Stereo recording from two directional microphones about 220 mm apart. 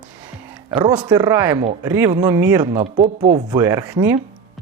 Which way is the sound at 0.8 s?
10° right (ahead or behind).